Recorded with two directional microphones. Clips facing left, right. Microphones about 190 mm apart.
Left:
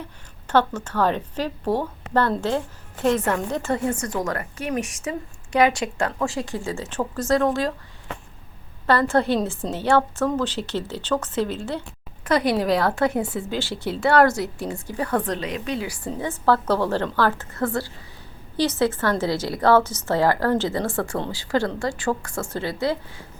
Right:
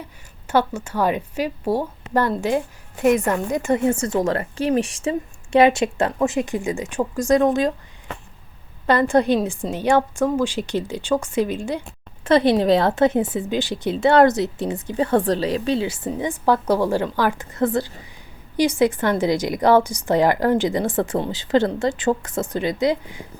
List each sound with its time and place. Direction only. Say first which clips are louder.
0.4 s a woman's voice: even; 10° right (ahead or behind)
8.9 s a woman's voice: right 3 dB; 15° right (ahead or behind)
12.2 s a woman's voice: right 5 dB; 25° right (ahead or behind)